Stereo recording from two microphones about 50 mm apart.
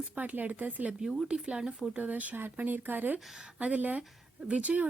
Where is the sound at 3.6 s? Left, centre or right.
Right.